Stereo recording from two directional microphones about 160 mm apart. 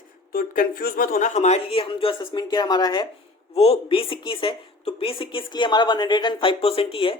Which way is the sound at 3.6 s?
35° left (ahead or behind).